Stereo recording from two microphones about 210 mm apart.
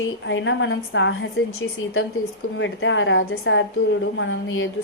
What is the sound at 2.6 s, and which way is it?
A woman's voice, 60° left (ahead or behind).